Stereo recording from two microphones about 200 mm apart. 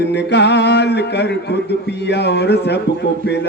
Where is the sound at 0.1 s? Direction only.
60° left (ahead or behind).